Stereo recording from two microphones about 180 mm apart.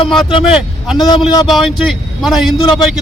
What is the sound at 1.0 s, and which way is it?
Speech, 25° left (ahead or behind).